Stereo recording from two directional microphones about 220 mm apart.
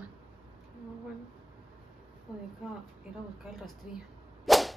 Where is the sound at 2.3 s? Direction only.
20° left (ahead or behind).